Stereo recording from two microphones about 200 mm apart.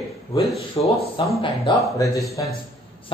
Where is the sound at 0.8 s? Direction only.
30° left (ahead or behind).